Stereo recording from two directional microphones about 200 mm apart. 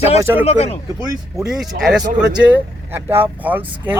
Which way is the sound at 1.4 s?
Centre (ahead or behind).